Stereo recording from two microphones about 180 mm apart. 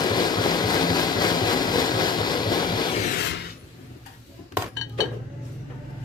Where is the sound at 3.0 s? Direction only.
50° left (ahead or behind).